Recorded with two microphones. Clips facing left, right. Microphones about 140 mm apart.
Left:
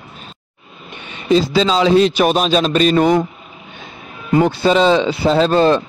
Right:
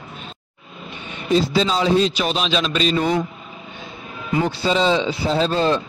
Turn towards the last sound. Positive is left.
turn(degrees=65)  # may be behind; listen again after turning